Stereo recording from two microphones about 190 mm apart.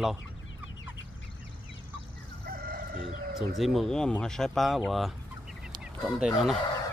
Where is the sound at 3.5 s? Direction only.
Centre (ahead or behind).